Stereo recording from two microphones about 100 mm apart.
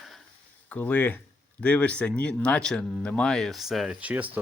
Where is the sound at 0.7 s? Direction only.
15° left (ahead or behind); by 3.9 s 5° right (ahead or behind).